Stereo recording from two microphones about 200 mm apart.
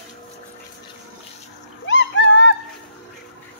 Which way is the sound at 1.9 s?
65° left (ahead or behind).